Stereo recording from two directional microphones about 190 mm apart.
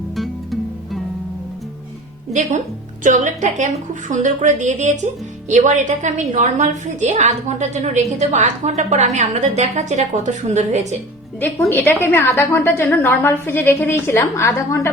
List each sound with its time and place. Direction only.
0.2 s music: centre (ahead or behind)
3.0 s a woman's voice: 40° right (ahead or behind)
11.3 s a woman's voice: 10° left (ahead or behind)